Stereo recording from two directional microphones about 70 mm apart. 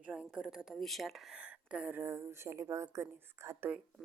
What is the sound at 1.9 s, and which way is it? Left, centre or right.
Speech, right.